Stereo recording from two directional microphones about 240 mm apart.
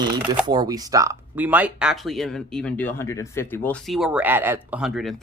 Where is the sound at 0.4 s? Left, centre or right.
Centre.